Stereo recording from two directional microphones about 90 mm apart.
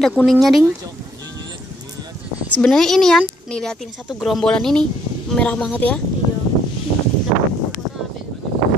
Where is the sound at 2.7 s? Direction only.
5° left (ahead or behind).